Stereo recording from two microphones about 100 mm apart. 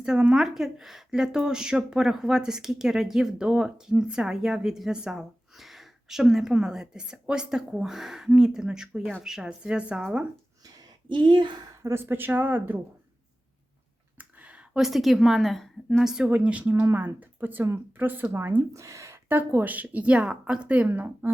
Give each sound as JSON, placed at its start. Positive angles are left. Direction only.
{"t": 0.0, "sound": "a woman's voice", "side_deg": -10}
{"t": 11.1, "sound": "speech", "side_deg": -50}
{"t": 11.7, "sound": "speech", "side_deg": -30}
{"t": 14.2, "sound": "a sound", "side_deg": -15}
{"t": 15.9, "sound": "speech", "side_deg": -5}
{"t": 18.7, "sound": "speech", "side_deg": -30}